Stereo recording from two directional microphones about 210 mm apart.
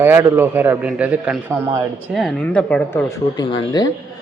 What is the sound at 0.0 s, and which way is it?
Speech, 10° right (ahead or behind).